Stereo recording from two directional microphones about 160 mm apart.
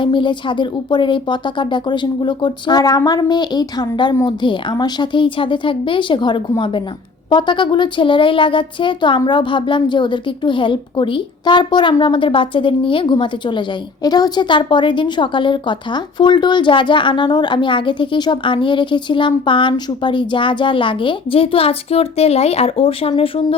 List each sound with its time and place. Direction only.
0.0 s speech: 30° left (ahead or behind)